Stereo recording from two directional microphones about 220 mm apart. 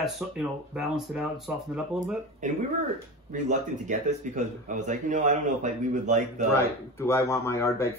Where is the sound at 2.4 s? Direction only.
35° right (ahead or behind).